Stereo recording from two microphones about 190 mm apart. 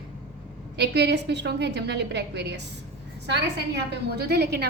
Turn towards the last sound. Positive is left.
turn(degrees=-60)  # may be behind; listen again after turning